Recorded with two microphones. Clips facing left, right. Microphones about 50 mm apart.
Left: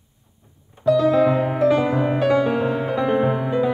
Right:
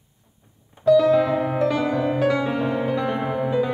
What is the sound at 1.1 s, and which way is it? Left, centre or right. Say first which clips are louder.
Music: left 2 dB; centre.